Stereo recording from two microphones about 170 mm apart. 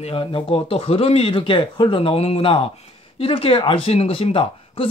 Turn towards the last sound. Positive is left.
turn(degrees=30)  # may be behind; listen again after turning